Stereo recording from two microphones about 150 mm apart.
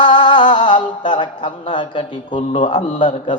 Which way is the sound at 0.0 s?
35° left (ahead or behind).